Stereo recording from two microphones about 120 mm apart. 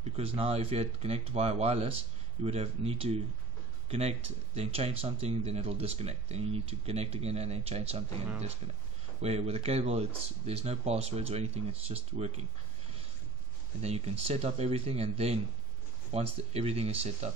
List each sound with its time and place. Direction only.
0.0 s speech: 55° right (ahead or behind)
4.6 s speech: 55° right (ahead or behind)
13.7 s speech: 60° right (ahead or behind)